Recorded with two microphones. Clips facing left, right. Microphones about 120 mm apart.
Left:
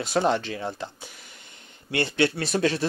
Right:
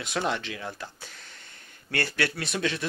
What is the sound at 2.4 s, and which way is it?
Speech, 40° left (ahead or behind).